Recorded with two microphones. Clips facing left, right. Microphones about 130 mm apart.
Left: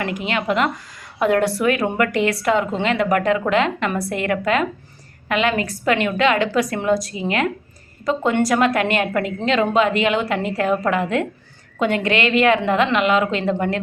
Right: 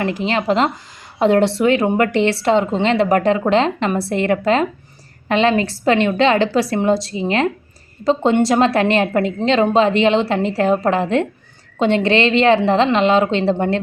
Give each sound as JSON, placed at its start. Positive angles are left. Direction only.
{"t": 0.0, "sound": "a woman's voice", "side_deg": -30}